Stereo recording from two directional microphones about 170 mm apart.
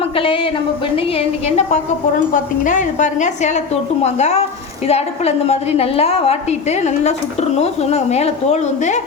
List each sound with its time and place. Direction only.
0.2 s a woman's voice: 30° left (ahead or behind)